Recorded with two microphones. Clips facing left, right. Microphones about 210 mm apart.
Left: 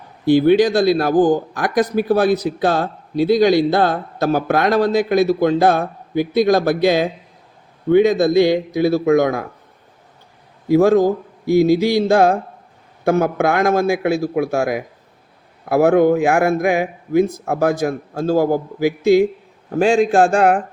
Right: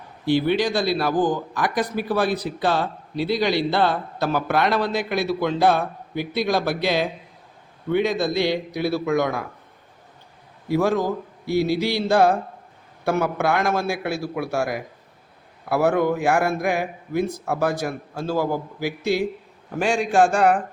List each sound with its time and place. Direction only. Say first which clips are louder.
0.3 s speech: left 8 dB; 45° left (ahead or behind)
10.8 s speech: left 8 dB; 45° left (ahead or behind)
15.7 s speech: left 7 dB; 45° left (ahead or behind)
19.8 s speech: left 5 dB; 40° left (ahead or behind)